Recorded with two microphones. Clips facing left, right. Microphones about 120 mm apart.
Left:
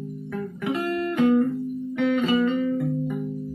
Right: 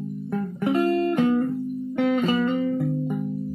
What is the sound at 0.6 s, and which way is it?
Music, 35° right (ahead or behind).